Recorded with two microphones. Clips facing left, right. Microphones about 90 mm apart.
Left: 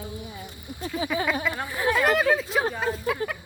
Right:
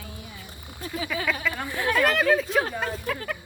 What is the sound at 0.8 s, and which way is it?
Speech, 30° left (ahead or behind).